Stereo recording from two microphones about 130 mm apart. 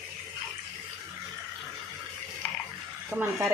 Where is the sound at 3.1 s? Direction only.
10° right (ahead or behind).